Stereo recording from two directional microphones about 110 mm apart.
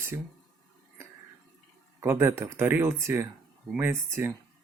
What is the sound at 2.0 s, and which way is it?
Speech, 20° right (ahead or behind).